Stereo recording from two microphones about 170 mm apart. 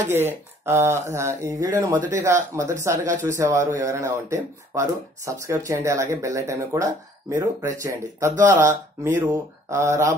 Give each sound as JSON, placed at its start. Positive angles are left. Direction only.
{"t": 0.1, "sound": "speech", "side_deg": -15}